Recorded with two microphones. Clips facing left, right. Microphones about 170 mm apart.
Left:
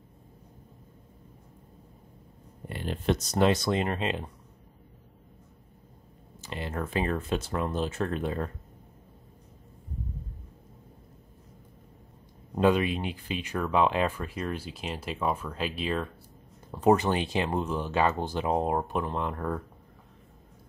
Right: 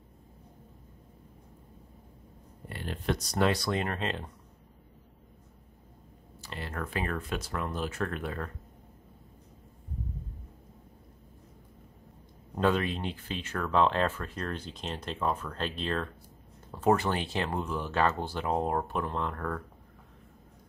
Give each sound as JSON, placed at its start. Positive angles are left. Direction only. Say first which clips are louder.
{"t": 2.7, "sound": "speech", "louder": "left 4 dB", "side_deg": 20}
{"t": 6.4, "sound": "speech", "louder": "left 4 dB", "side_deg": 20}
{"t": 12.5, "sound": "speech", "louder": "left 4 dB", "side_deg": 15}